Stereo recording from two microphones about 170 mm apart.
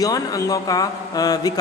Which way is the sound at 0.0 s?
20° left (ahead or behind).